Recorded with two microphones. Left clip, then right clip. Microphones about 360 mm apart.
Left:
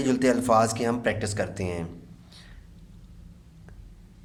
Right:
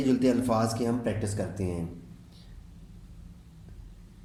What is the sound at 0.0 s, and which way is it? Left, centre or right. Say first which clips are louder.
A man's voice: left 2 dB; left.